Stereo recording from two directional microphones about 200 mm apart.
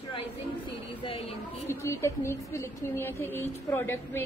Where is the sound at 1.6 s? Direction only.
15° left (ahead or behind).